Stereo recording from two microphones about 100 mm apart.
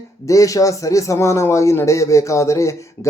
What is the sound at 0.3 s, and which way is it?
A man's voice, 35° left (ahead or behind).